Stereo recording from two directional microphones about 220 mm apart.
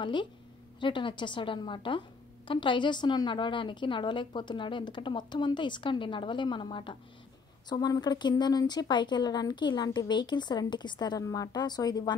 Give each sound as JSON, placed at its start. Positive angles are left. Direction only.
{"t": 0.0, "sound": "a woman's voice", "side_deg": 20}